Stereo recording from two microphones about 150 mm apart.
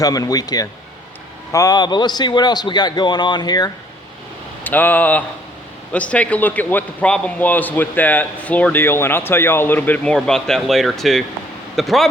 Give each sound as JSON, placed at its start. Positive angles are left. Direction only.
{"t": 0.0, "sound": "a man's voice", "side_deg": 25}
{"t": 4.6, "sound": "a man's voice", "side_deg": 10}